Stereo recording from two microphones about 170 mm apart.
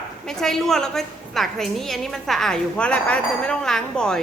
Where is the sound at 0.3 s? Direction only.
Centre (ahead or behind).